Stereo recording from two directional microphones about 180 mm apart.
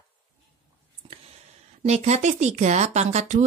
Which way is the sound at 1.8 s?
40° right (ahead or behind).